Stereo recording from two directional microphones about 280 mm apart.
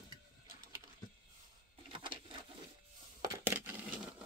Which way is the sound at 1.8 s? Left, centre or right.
Centre.